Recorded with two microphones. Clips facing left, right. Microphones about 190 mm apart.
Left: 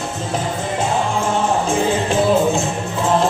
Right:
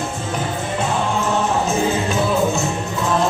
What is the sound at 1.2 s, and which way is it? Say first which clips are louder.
Music: left 1 dB; 30° left (ahead or behind).